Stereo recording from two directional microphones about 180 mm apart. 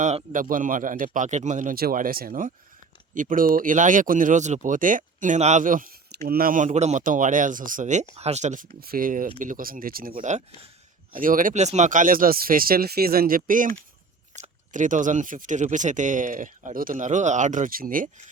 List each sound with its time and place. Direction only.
0.3 s speech: 50° right (ahead or behind)